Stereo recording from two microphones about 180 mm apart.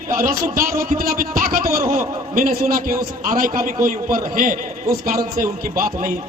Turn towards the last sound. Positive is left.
turn(degrees=-50)  # may be behind; listen again after turning